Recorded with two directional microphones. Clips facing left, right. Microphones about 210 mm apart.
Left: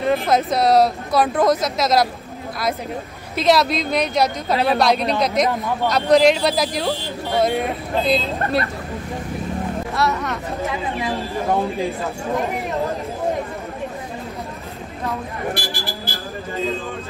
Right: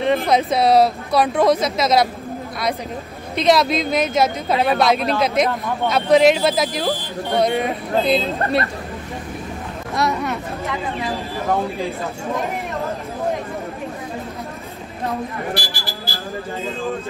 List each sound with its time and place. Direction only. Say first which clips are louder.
0.0 s speech: right 1 dB; centre (ahead or behind)
3.3 s speech: right 1 dB; centre (ahead or behind)
9.9 s speech: right 2 dB; 15° right (ahead or behind)
15.5 s speech: even; 55° left (ahead or behind)